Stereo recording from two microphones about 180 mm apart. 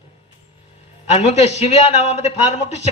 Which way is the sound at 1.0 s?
40° left (ahead or behind).